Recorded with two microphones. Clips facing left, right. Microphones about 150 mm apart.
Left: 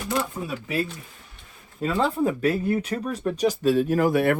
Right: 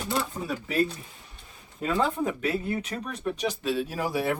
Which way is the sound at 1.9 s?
30° left (ahead or behind).